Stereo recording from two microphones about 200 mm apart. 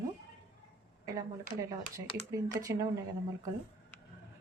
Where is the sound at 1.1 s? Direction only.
15° right (ahead or behind).